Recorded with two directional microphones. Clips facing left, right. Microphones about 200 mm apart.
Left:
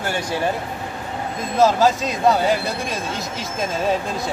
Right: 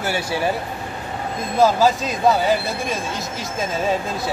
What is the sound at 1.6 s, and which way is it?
A man's voice, centre (ahead or behind).